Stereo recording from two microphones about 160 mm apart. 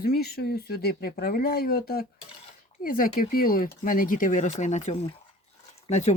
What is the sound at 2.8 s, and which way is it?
Speech, 60° left (ahead or behind).